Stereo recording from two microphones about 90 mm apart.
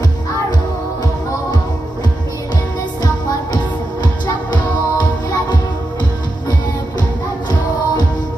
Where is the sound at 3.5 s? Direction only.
50° left (ahead or behind).